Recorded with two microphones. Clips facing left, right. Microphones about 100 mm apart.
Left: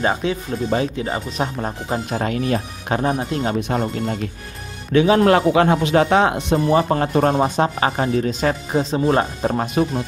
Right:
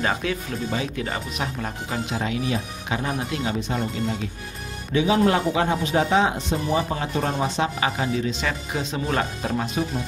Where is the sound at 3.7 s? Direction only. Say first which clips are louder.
Left 4 dB; 60° left (ahead or behind); by 9.6 s 35° left (ahead or behind).